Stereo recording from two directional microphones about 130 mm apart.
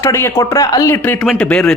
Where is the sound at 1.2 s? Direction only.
5° left (ahead or behind).